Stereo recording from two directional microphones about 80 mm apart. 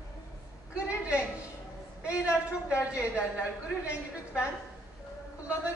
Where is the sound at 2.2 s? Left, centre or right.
Left.